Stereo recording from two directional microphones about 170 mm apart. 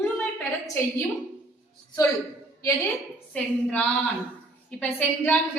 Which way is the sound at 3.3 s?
5° left (ahead or behind).